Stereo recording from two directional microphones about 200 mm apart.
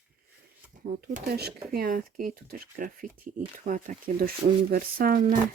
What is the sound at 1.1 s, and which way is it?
Speech, 50° right (ahead or behind).